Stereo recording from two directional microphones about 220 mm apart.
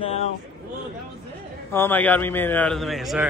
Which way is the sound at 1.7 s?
10° left (ahead or behind).